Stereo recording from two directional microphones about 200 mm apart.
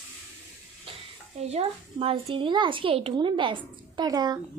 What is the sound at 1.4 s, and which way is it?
A woman's voice, 30° right (ahead or behind).